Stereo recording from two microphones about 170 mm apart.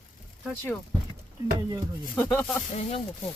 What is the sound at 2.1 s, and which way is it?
Speech, 15° left (ahead or behind).